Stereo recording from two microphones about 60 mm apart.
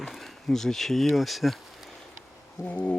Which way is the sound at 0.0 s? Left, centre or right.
Centre.